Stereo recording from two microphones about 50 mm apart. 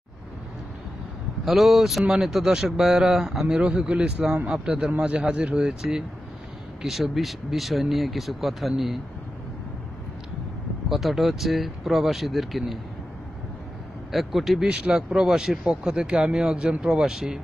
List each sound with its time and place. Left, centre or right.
1.4 s a man's voice: centre
10.9 s speech: centre
14.1 s speech: centre
14.7 s a man's voice: centre